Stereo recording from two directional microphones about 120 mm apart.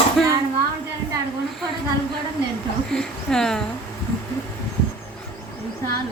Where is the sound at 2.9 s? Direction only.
5° left (ahead or behind).